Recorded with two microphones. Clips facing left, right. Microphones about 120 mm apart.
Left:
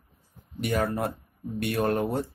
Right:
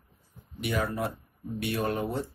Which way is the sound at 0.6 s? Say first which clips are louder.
Left 3 dB; 45° left (ahead or behind).